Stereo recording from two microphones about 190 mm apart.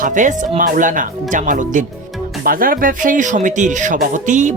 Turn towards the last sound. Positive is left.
turn(degrees=-40)  # may be behind; listen again after turning